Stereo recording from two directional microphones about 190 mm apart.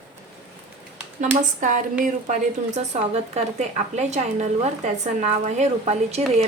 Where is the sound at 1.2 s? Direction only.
40° right (ahead or behind).